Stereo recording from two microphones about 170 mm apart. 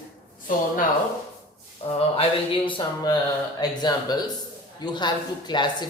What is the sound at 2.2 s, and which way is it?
Speech, 30° left (ahead or behind).